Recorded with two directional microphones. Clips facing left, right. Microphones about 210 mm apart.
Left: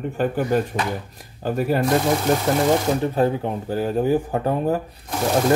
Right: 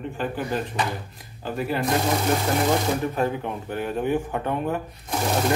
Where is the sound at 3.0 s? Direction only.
30° left (ahead or behind).